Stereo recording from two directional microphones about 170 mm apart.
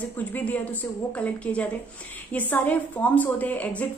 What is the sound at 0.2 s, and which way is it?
Speech, 10° left (ahead or behind).